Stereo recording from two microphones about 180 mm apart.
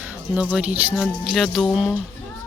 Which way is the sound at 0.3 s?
5° right (ahead or behind).